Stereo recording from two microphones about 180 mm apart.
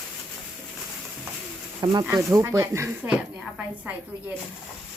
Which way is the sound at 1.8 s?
25° right (ahead or behind).